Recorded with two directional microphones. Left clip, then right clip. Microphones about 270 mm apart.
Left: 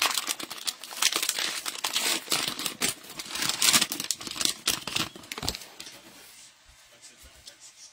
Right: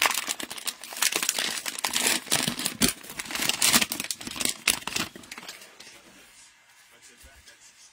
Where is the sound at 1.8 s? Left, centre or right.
Centre.